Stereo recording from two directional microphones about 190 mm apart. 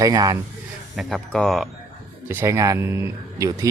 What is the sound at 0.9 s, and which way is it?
Speech, centre (ahead or behind).